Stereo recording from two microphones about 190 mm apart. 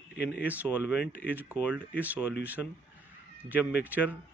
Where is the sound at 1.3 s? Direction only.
10° right (ahead or behind).